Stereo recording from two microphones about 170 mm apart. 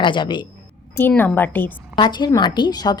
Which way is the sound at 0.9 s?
10° left (ahead or behind).